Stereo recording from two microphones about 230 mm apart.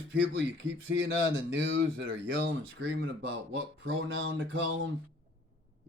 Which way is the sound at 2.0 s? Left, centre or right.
Right.